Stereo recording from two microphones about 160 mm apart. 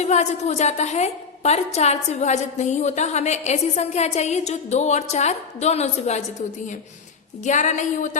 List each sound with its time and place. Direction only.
0.0 s a woman's voice: 45° left (ahead or behind)
7.4 s a woman's voice: 50° left (ahead or behind)